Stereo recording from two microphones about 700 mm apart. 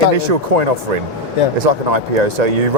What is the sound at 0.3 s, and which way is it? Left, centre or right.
Speech, right.